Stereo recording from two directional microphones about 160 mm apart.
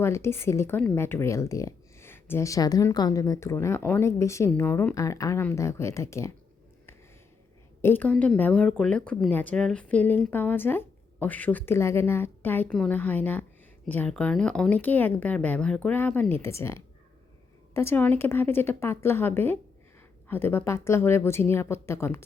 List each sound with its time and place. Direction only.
0.0 s speech: 15° left (ahead or behind)
7.8 s speech: 15° left (ahead or behind)